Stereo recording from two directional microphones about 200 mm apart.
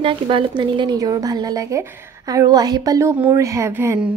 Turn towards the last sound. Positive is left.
turn(degrees=-10)  # may be behind; listen again after turning